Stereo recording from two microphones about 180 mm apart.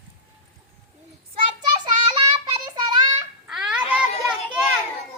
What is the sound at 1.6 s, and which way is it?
Child singing, 25° right (ahead or behind).